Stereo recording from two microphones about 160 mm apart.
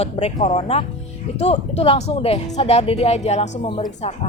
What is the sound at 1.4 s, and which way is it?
Speech, 40° left (ahead or behind).